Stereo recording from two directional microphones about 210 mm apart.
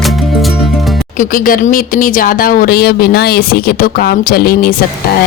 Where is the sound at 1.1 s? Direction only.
40° left (ahead or behind).